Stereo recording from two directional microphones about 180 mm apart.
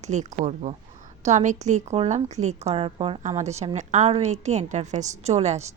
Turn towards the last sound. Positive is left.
turn(degrees=-40)  # may be behind; listen again after turning